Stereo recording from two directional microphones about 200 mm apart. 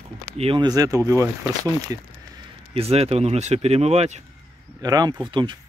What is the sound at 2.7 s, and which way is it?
Speech, 30° right (ahead or behind).